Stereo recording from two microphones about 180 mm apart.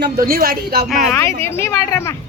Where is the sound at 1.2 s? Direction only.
15° left (ahead or behind).